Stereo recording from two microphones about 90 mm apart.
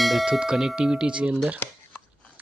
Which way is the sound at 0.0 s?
Centre (ahead or behind).